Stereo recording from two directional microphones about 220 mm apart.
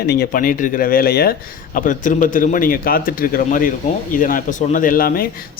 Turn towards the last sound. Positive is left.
turn(degrees=40)  # may be behind; listen again after turning